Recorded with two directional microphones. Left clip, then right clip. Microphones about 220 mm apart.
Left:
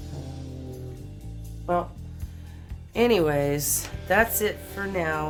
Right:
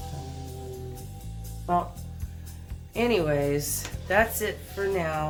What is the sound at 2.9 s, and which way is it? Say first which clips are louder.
Speech: left 3 dB; 45° left (ahead or behind).